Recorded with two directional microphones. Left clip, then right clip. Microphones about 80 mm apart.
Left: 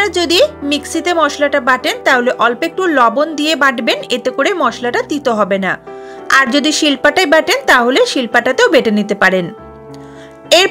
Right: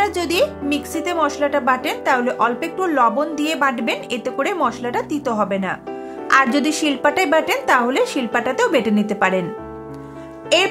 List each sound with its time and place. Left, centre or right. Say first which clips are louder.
0.0 s speech: left 6 dB; left
4.4 s speech: left 5 dB; left
6.5 s speech: left 6 dB; left
9.2 s speech: left 7 dB; left